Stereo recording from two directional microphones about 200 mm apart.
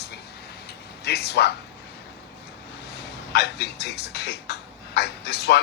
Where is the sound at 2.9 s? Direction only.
55° left (ahead or behind).